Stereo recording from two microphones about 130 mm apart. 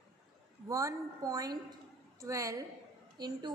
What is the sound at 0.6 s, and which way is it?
A woman's voice, 25° right (ahead or behind).